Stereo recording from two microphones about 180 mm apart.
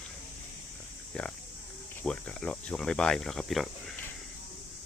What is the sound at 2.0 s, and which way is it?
Speech, 5° left (ahead or behind).